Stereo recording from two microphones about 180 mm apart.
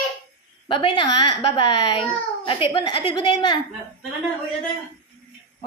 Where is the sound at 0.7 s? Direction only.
25° left (ahead or behind).